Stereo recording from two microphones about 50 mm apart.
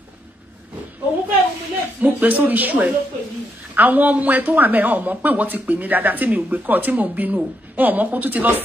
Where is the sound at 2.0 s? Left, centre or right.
Right.